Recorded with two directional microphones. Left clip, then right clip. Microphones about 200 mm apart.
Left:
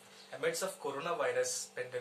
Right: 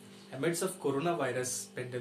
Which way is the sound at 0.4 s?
15° right (ahead or behind).